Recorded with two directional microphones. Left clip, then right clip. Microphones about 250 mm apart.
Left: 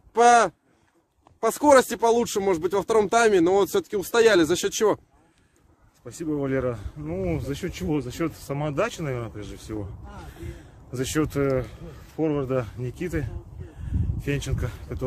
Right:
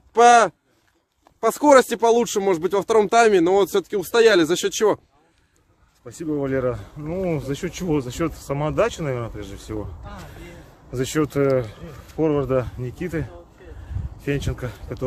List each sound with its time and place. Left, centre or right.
0.1 s speech: centre
6.0 s speech: centre
10.9 s speech: centre